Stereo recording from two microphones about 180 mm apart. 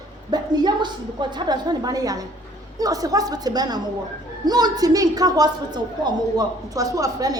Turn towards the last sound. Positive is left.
turn(degrees=-20)  # may be behind; listen again after turning